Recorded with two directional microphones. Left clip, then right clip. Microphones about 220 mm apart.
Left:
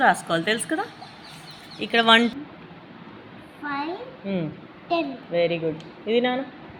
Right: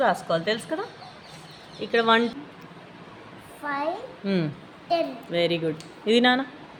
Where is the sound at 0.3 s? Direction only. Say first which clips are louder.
Left 2 dB; 5° right (ahead or behind).